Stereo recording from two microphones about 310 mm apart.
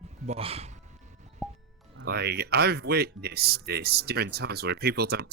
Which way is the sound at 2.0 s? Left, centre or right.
Right.